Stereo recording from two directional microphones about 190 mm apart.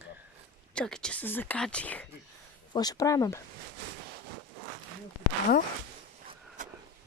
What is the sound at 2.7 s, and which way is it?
Speech, 20° left (ahead or behind).